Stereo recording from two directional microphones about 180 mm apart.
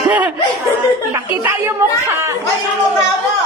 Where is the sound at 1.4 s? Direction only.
15° right (ahead or behind).